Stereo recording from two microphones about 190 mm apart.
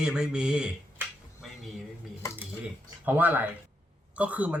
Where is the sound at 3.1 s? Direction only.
10° right (ahead or behind).